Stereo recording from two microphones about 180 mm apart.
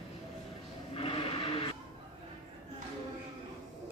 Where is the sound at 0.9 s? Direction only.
30° left (ahead or behind).